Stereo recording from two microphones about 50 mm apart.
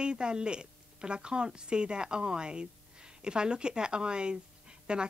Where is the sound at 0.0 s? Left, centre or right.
Centre.